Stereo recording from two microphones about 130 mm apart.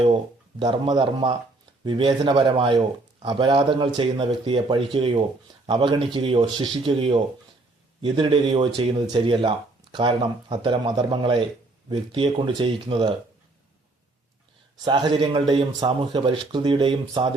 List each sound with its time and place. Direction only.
0.6 s speech: 35° right (ahead or behind)
8.0 s speech: 35° right (ahead or behind)
14.8 s speech: 35° right (ahead or behind)